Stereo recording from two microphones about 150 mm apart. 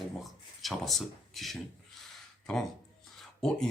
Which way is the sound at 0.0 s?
Centre (ahead or behind).